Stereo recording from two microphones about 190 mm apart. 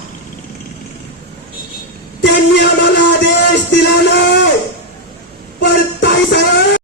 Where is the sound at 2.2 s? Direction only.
65° left (ahead or behind).